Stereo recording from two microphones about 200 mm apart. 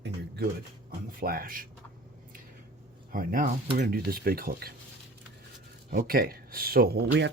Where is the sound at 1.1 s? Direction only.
45° right (ahead or behind).